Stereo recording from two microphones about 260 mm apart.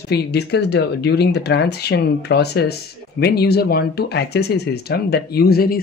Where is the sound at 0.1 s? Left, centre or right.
Left.